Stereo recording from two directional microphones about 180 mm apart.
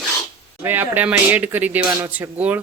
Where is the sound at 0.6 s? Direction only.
10° right (ahead or behind).